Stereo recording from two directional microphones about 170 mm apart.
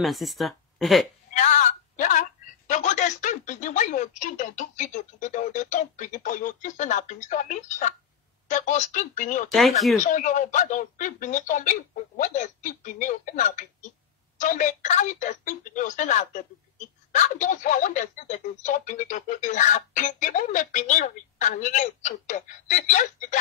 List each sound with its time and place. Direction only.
0.0 s speech: centre (ahead or behind)
1.3 s a sound: 45° left (ahead or behind)
2.7 s a woman's voice: 45° left (ahead or behind)
9.5 s speech: centre (ahead or behind)
10.0 s a woman's voice: 50° left (ahead or behind)